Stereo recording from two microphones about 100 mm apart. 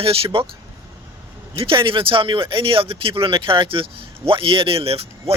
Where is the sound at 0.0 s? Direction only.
65° right (ahead or behind).